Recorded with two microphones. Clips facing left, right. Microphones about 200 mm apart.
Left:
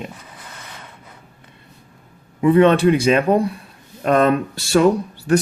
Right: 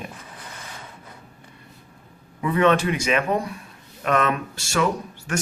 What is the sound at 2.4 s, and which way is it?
Speech, 30° left (ahead or behind).